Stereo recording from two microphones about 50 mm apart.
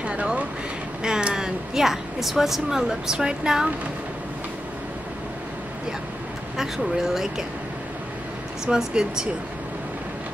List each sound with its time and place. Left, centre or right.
0.0 s a sound: right
1.0 s a woman's voice: centre
6.5 s speech: centre
8.6 s speech: centre